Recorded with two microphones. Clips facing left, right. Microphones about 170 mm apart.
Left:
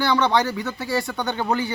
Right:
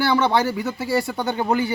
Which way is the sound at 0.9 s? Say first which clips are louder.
Right 3 dB; 25° right (ahead or behind).